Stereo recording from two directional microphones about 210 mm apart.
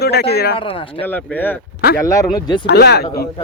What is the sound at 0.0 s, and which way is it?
Speech, 50° left (ahead or behind).